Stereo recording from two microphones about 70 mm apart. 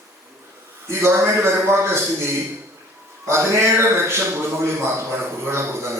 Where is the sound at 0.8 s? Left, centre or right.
Right.